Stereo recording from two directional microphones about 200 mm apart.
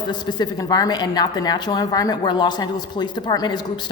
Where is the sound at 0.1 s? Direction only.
20° left (ahead or behind).